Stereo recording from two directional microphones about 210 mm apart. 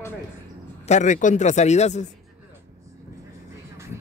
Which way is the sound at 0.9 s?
35° left (ahead or behind).